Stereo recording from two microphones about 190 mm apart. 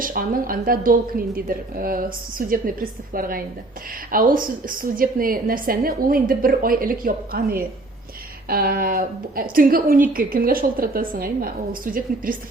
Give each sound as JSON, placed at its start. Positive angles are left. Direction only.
{"t": 0.0, "sound": "a woman's voice", "side_deg": -45}